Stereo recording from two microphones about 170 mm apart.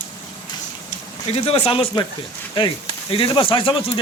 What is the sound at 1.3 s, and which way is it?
Speech, 35° left (ahead or behind).